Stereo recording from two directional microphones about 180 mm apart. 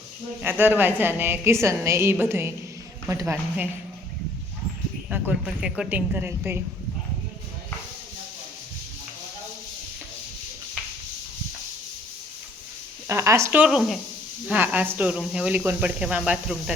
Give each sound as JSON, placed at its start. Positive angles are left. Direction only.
{"t": 0.4, "sound": "speech", "side_deg": -10}
{"t": 5.0, "sound": "speech", "side_deg": -5}
{"t": 13.1, "sound": "speech", "side_deg": -15}